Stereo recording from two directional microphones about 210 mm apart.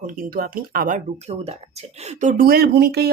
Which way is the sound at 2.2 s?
45° right (ahead or behind).